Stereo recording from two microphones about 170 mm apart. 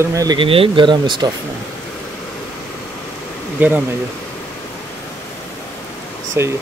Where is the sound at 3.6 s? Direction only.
10° right (ahead or behind).